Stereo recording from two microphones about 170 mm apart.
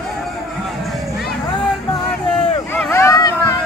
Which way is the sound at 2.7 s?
15° left (ahead or behind).